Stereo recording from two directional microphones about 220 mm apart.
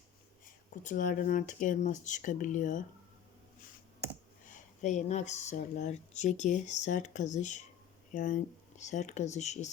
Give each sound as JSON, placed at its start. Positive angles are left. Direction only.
{"t": 0.4, "sound": "speech", "side_deg": 35}
{"t": 4.4, "sound": "speech", "side_deg": 35}